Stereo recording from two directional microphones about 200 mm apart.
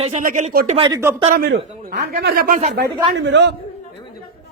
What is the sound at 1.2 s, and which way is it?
Speech, 40° right (ahead or behind).